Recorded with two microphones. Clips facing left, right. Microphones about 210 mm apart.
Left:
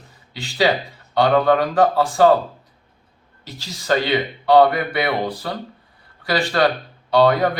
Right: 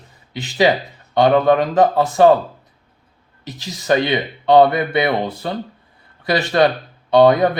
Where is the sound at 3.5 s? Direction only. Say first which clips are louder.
Right 3 dB; 20° right (ahead or behind).